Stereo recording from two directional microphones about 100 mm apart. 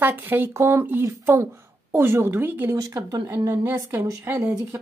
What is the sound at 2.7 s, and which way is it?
Speech, 40° right (ahead or behind).